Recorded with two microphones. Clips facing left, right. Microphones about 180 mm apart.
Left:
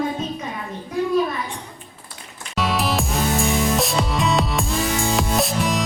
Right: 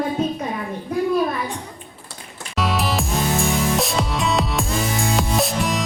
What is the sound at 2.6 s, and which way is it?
Music, centre (ahead or behind).